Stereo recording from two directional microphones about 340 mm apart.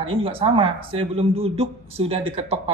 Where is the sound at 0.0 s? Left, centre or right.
Centre.